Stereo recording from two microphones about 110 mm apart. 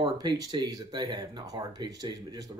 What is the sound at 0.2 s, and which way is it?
Speech, 40° right (ahead or behind).